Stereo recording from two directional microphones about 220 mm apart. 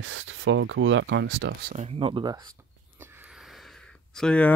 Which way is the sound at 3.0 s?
5° right (ahead or behind).